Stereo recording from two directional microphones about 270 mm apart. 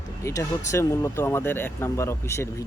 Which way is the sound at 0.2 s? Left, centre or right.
Centre.